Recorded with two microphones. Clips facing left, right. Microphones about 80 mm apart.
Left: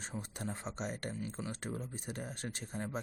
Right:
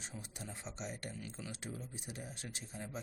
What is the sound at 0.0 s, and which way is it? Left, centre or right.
Speech, left.